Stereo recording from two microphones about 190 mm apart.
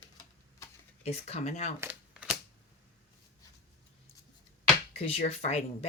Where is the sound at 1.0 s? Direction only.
35° left (ahead or behind).